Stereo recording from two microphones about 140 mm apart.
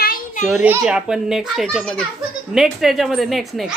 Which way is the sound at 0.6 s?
10° right (ahead or behind).